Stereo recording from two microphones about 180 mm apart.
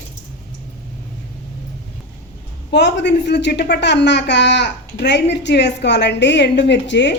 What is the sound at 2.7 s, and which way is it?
A woman's voice, 70° left (ahead or behind).